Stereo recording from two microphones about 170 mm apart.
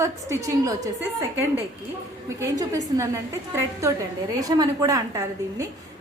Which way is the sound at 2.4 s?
20° right (ahead or behind).